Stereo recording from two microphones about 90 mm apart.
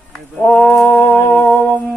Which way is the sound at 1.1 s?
20° left (ahead or behind).